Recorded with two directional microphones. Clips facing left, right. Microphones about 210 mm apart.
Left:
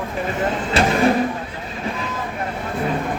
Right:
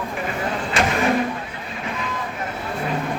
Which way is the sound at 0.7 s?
35° left (ahead or behind).